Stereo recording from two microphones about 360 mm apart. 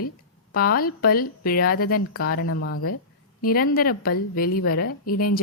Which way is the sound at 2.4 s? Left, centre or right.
Left.